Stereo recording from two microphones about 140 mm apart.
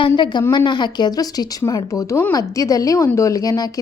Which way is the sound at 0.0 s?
30° left (ahead or behind).